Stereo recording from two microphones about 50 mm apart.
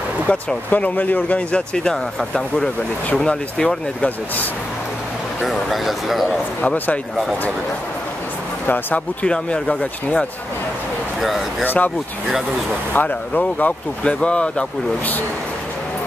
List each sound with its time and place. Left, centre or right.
0.3 s speech: left
1.5 s speech: centre
5.5 s speech: centre
6.6 s speech: left
8.6 s speech: left
9.2 s speech: left
11.1 s speech: centre
11.6 s speech: left
12.9 s speech: left
14.0 s speech: left